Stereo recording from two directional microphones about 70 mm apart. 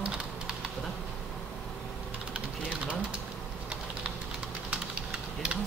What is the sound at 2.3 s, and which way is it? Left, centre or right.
Speech, centre.